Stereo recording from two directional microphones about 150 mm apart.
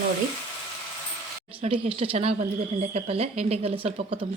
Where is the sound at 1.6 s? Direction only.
40° right (ahead or behind).